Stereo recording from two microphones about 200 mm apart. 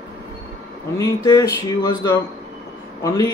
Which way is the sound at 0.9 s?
15° left (ahead or behind).